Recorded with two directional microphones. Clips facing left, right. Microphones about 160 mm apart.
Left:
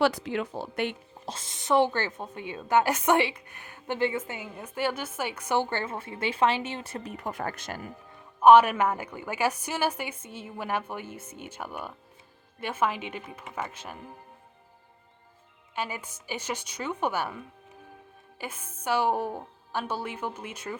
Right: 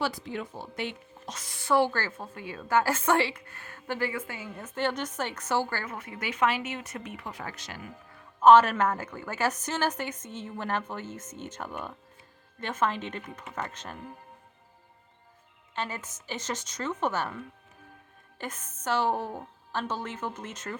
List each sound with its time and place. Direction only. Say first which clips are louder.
0.0 s speech: left 6 dB; 75° left (ahead or behind)
1.2 s a woman's voice: left 3 dB; 30° left (ahead or behind)
8.4 s a woman's voice: left 1 dB; 15° left (ahead or behind)
15.7 s a woman's voice: left 1 dB; 10° left (ahead or behind)